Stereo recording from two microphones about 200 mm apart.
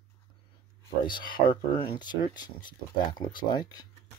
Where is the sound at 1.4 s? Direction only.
45° left (ahead or behind).